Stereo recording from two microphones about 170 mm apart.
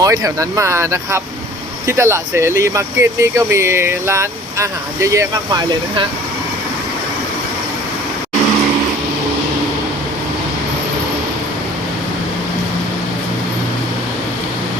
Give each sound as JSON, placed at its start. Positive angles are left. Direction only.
{"t": 0.0, "sound": "speech", "side_deg": -20}